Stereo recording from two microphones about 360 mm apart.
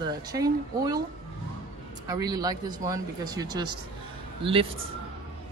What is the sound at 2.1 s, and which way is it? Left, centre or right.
Speech, centre.